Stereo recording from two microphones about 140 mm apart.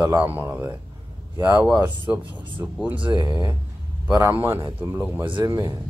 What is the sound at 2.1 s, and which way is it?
Speech, 10° right (ahead or behind).